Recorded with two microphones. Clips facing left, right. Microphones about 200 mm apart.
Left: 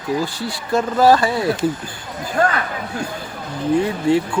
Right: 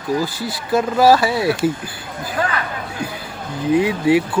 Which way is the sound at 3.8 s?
10° right (ahead or behind).